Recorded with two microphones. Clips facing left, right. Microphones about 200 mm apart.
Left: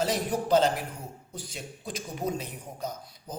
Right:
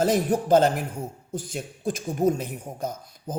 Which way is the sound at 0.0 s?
50° right (ahead or behind).